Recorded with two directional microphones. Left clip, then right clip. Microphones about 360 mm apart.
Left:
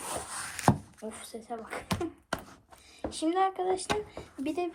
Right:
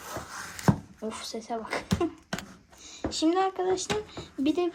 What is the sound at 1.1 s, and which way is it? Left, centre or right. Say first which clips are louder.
Speech: right 7 dB; centre.